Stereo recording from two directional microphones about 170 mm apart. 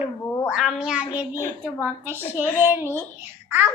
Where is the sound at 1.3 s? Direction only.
15° left (ahead or behind).